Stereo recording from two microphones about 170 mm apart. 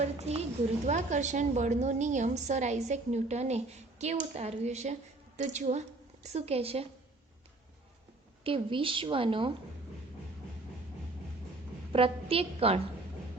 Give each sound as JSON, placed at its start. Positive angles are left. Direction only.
{"t": 0.0, "sound": "a woman's voice", "side_deg": -40}
{"t": 8.4, "sound": "speech", "side_deg": -30}
{"t": 11.9, "sound": "a woman's voice", "side_deg": -35}